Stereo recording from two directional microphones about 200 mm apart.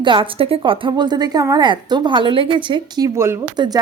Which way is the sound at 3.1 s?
15° right (ahead or behind).